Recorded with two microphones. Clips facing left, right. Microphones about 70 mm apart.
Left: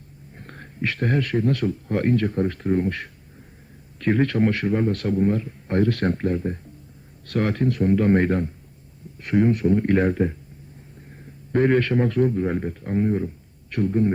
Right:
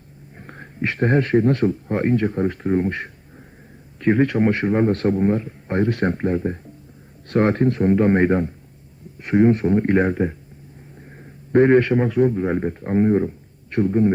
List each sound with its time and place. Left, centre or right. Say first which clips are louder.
0.3 s speech: right 3 dB; centre
11.5 s speech: right 5 dB; right